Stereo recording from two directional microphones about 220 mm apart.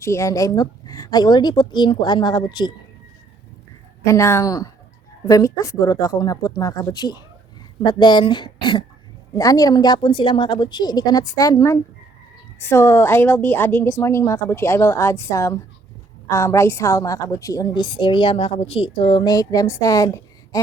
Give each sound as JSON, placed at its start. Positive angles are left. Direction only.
{"t": 0.0, "sound": "a woman's voice", "side_deg": 15}
{"t": 4.0, "sound": "a woman's voice", "side_deg": 10}